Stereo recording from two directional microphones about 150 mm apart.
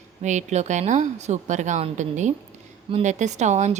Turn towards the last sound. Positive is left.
turn(degrees=-50)  # may be behind; listen again after turning